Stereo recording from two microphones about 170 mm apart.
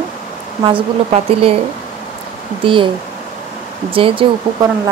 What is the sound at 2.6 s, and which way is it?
Speech, 30° right (ahead or behind).